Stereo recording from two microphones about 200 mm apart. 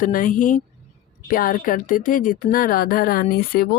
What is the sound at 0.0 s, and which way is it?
A woman's voice, 40° left (ahead or behind).